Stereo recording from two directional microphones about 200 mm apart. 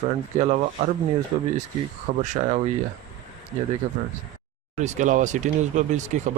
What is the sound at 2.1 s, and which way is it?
Speech, 45° right (ahead or behind).